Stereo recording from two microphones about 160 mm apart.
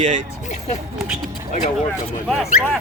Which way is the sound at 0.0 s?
50° right (ahead or behind).